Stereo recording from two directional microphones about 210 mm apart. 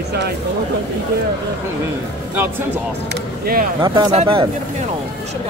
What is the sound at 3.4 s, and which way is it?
Speech, 45° right (ahead or behind).